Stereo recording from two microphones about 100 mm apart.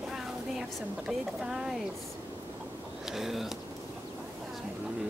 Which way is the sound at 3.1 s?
5° right (ahead or behind).